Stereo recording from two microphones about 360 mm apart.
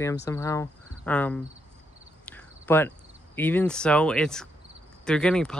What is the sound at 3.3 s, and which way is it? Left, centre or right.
Speech, centre.